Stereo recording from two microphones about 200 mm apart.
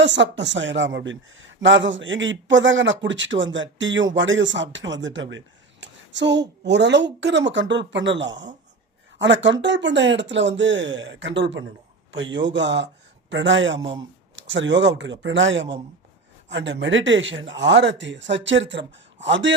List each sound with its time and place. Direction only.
0.0 s speech: 65° right (ahead or behind)